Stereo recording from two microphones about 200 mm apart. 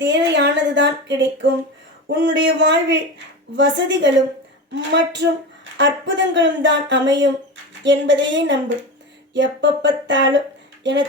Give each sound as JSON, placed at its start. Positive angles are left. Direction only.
{"t": 0.0, "sound": "speech", "side_deg": -65}